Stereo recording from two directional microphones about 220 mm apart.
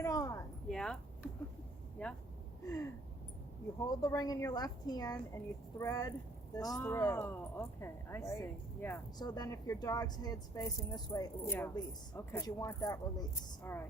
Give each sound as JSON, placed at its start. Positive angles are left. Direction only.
{"t": 0.0, "sound": "a sound", "side_deg": 15}
{"t": 0.7, "sound": "speech", "side_deg": 5}
{"t": 3.8, "sound": "speech", "side_deg": 15}